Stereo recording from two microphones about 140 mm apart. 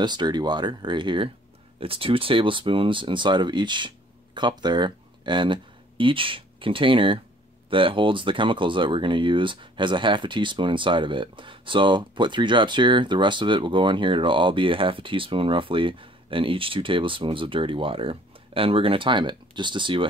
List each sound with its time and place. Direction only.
0.0 s speech: 30° right (ahead or behind)